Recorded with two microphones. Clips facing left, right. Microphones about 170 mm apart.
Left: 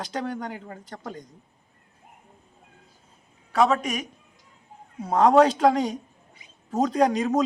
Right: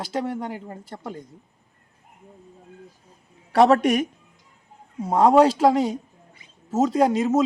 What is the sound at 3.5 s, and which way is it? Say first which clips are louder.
Speech: right 6 dB; 70° right (ahead or behind).